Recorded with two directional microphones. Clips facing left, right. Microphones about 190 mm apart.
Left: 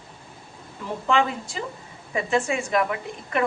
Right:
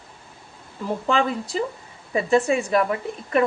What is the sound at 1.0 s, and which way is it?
A woman's voice, 35° right (ahead or behind).